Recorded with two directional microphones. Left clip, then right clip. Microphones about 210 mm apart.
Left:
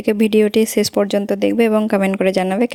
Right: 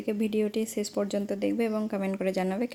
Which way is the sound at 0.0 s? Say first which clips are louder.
Left 14 dB; 45° left (ahead or behind).